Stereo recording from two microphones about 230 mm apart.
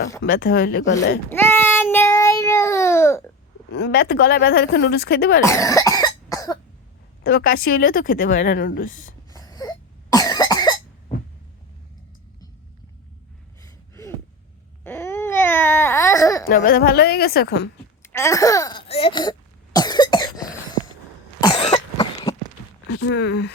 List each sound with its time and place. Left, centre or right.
0.2 s a woman's voice: left
1.3 s child singing: centre
3.8 s a woman's voice: left
5.4 s cough: centre
7.3 s speech: left
8.3 s speech: left
9.3 s cough: centre
13.6 s gasp: centre
14.8 s baby cry: centre
16.5 s a woman's voice: left
18.0 s throat clearing: centre
21.4 s cough: left
22.9 s speech: left